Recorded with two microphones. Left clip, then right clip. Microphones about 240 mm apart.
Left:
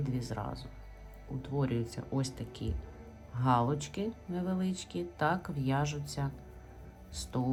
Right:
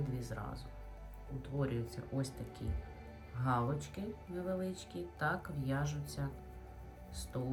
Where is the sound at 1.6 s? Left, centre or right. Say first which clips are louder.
Left 2 dB; centre.